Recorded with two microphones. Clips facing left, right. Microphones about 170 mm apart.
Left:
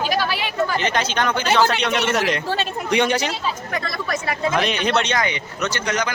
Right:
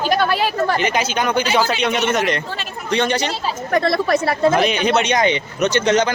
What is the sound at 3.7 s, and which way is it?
Speech, 35° right (ahead or behind).